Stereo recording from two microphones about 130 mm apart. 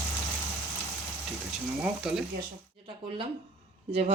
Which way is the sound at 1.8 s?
5° right (ahead or behind).